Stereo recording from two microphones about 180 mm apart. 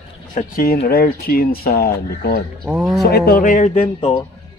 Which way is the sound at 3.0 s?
60° left (ahead or behind).